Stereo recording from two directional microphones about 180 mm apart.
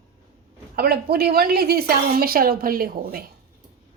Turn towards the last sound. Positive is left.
turn(degrees=-55)  # may be behind; listen again after turning